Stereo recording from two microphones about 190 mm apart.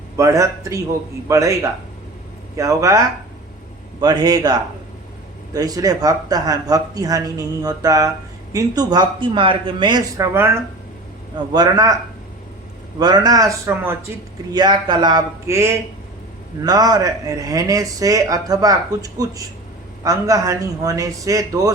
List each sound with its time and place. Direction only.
0.2 s a man's voice: 15° right (ahead or behind)
2.6 s a man's voice: 15° right (ahead or behind)
4.0 s speech: 20° right (ahead or behind)
5.5 s speech: 20° right (ahead or behind)
10.3 s a man's voice: 15° right (ahead or behind)
13.0 s a man's voice: 20° right (ahead or behind)